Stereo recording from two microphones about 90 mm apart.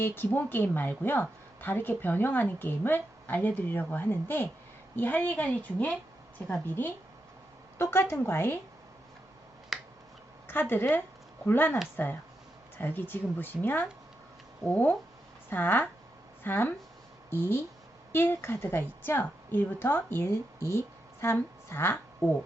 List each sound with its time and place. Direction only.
0.0 s a woman's voice: 20° left (ahead or behind)
9.7 s finger snapping: 5° right (ahead or behind)
10.5 s a woman's voice: 25° left (ahead or behind)